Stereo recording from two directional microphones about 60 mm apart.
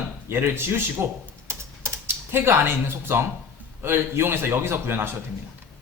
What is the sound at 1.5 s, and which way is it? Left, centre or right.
Typing, right.